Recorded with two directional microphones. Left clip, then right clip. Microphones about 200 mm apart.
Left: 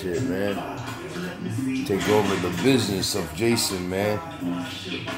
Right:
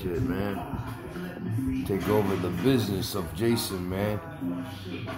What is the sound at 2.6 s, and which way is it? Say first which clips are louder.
Speech: left 5 dB; centre (ahead or behind).